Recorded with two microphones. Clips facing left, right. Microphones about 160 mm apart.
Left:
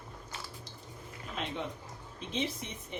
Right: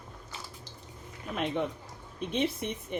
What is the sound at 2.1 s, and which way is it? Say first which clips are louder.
Speech: right 6 dB; 60° right (ahead or behind).